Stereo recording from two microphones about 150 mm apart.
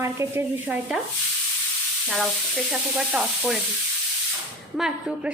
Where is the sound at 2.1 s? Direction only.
Centre (ahead or behind).